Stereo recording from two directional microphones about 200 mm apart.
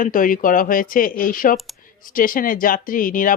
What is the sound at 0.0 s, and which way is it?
Speech, 45° left (ahead or behind).